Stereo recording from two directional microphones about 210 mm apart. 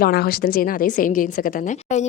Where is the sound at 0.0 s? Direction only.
45° left (ahead or behind).